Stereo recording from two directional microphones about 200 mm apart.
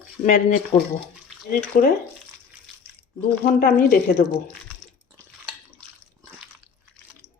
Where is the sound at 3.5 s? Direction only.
50° left (ahead or behind).